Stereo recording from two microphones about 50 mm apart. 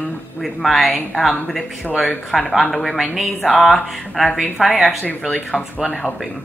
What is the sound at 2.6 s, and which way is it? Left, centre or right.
Speech, centre.